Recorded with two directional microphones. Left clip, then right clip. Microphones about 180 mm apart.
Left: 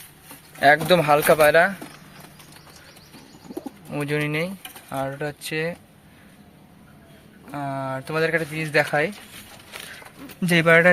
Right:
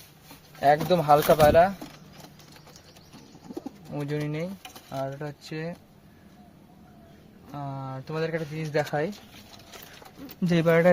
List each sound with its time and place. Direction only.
0.6 s speech: 5° right (ahead or behind)
3.9 s speech: 5° right (ahead or behind)
7.5 s speech: centre (ahead or behind)
8.5 s speech: 15° right (ahead or behind)
10.4 s speech: 25° right (ahead or behind)